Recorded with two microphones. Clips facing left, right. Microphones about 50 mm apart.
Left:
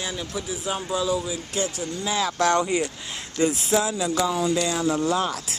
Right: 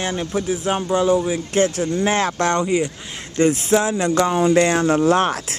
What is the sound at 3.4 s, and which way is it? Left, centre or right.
Speech, right.